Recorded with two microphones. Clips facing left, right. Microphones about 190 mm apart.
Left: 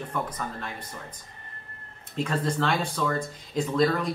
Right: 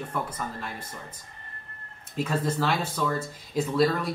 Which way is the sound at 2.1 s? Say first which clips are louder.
Even; 5° right (ahead or behind).